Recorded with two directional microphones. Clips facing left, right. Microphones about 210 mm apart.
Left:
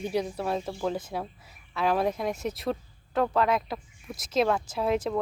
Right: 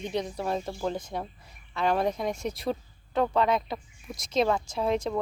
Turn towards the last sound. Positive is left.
turn(degrees=5)  # may be behind; listen again after turning